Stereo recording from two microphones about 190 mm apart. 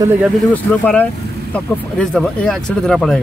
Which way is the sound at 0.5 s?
10° left (ahead or behind).